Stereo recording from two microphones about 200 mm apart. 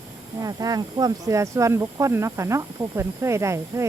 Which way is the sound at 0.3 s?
20° right (ahead or behind).